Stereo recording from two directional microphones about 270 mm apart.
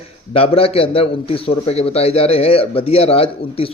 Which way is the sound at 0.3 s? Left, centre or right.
Left.